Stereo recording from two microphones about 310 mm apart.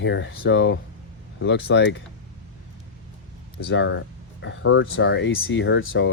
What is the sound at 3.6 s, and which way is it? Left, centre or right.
Speech, left.